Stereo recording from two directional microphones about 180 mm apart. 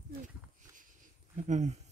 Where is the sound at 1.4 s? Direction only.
40° right (ahead or behind).